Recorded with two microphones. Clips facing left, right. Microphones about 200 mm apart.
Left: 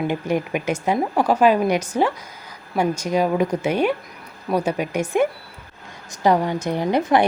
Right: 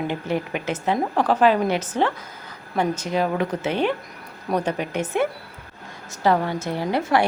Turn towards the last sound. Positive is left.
turn(degrees=20)  # may be behind; listen again after turning